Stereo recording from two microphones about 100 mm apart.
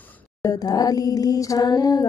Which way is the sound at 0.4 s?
40° left (ahead or behind).